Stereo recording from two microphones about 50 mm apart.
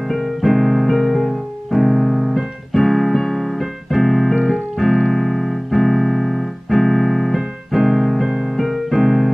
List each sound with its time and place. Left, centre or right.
0.1 s piano: centre
4.5 s keyboard: centre
8.5 s music: centre